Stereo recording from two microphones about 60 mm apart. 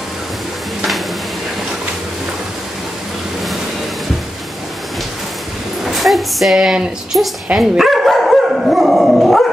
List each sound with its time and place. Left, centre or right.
5.9 s speech: centre
7.5 s dog: centre